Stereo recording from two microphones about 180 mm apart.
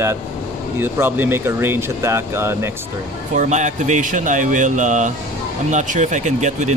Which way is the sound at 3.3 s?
40° right (ahead or behind).